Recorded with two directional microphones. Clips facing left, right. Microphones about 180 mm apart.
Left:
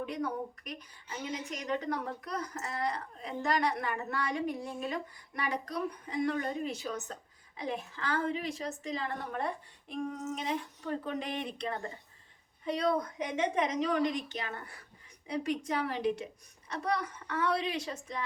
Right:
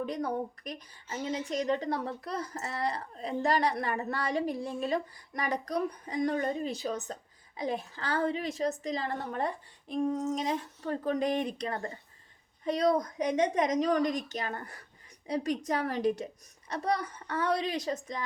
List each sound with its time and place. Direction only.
0.0 s speech: 35° right (ahead or behind)